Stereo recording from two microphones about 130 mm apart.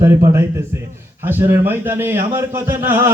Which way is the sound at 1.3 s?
15° right (ahead or behind).